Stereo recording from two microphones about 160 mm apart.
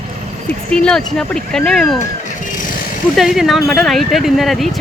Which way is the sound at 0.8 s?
5° left (ahead or behind).